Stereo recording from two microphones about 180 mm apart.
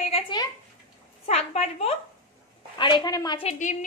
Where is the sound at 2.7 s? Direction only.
25° left (ahead or behind).